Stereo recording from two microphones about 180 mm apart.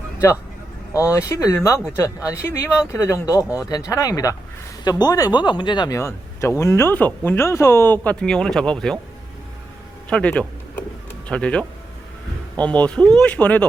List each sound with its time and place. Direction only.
0.9 s speech: 15° left (ahead or behind)
10.1 s a sound: 5° left (ahead or behind)
11.3 s speech: 5° left (ahead or behind)
12.6 s speech: 5° left (ahead or behind)